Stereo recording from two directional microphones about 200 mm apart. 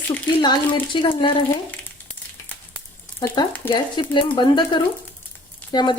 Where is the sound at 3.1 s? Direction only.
20° left (ahead or behind).